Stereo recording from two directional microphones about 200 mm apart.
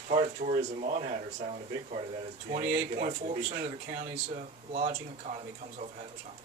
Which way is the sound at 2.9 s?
35° right (ahead or behind).